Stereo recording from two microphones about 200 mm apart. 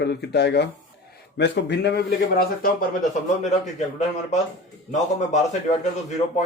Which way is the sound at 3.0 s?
35° left (ahead or behind).